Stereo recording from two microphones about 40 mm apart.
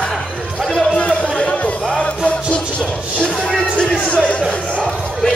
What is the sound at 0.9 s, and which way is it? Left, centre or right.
Music, left.